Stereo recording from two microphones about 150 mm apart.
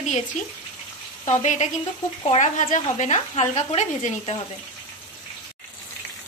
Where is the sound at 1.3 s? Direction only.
50° left (ahead or behind).